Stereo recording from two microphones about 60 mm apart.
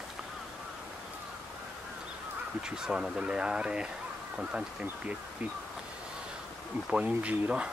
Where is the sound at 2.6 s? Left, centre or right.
Centre.